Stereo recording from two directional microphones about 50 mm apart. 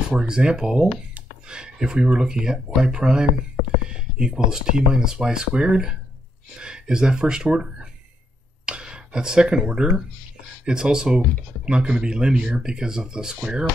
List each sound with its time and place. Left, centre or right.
0.1 s speech: centre